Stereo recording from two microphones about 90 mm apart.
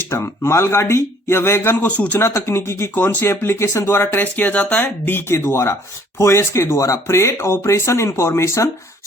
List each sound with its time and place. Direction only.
0.1 s speech: 30° left (ahead or behind); by 2.2 s 15° left (ahead or behind)
2.2 s speech: 30° left (ahead or behind)